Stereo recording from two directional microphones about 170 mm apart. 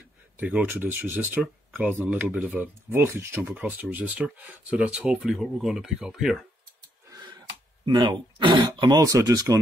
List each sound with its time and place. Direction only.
0.4 s speech: 10° right (ahead or behind)
7.8 s speech: 25° right (ahead or behind)